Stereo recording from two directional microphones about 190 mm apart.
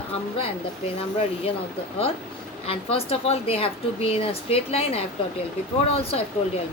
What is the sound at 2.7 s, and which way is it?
A woman's voice, 30° left (ahead or behind).